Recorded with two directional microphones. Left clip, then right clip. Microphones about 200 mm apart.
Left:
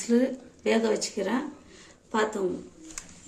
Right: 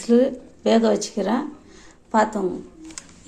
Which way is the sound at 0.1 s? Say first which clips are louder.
Right 8 dB; 20° right (ahead or behind).